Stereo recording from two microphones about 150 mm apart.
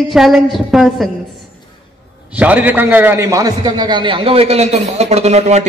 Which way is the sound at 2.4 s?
10° right (ahead or behind).